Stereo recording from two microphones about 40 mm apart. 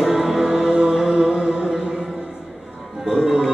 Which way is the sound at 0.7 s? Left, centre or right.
Centre.